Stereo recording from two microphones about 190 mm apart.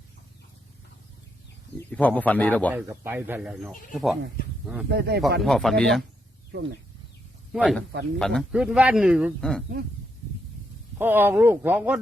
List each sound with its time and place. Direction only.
1.9 s a man's voice: 5° left (ahead or behind)
2.7 s speech: 10° right (ahead or behind)
4.9 s speech: 60° right (ahead or behind)
5.4 s speech: centre (ahead or behind)
7.5 s speech: centre (ahead or behind)
10.9 s speech: 10° right (ahead or behind)